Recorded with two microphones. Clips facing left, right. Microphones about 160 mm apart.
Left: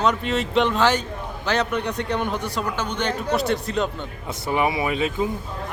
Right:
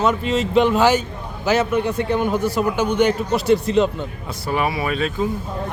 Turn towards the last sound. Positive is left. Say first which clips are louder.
# right 1 dB
turn(degrees=15)  # may be behind; listen again after turning